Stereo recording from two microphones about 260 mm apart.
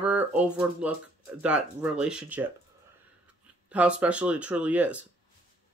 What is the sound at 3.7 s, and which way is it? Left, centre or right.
Speech, centre.